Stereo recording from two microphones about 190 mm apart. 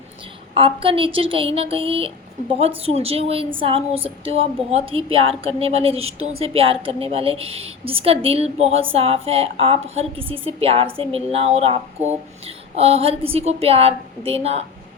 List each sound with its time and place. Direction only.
0.5 s a woman's voice: 30° right (ahead or behind)